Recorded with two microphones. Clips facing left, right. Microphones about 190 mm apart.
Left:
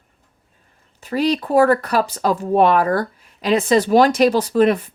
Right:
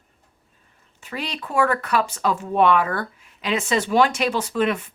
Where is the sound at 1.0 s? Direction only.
35° left (ahead or behind).